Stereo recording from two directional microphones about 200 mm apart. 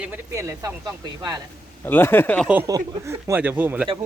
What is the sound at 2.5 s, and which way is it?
Speech, 15° right (ahead or behind).